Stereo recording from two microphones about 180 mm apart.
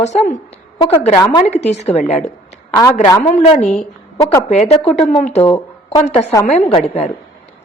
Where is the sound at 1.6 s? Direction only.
40° left (ahead or behind).